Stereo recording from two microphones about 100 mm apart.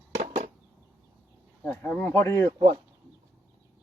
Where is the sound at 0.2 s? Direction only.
90° right.